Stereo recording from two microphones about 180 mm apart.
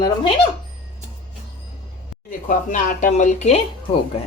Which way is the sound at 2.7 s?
45° left (ahead or behind).